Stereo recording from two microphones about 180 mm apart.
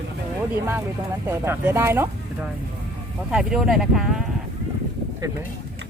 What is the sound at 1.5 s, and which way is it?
Speech, 15° right (ahead or behind).